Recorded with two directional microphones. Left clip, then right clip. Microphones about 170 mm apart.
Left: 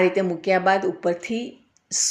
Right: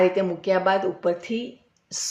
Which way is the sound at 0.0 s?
20° left (ahead or behind).